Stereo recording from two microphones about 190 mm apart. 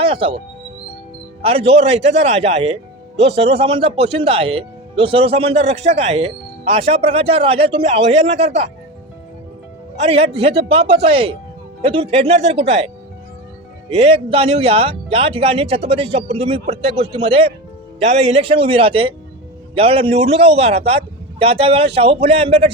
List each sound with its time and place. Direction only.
0.0 s speech: 30° right (ahead or behind)
1.4 s speech: 30° right (ahead or behind)
10.0 s speech: 30° right (ahead or behind)
13.9 s speech: 30° right (ahead or behind)